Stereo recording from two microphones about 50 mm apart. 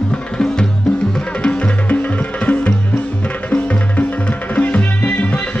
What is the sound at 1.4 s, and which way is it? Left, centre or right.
Music, left.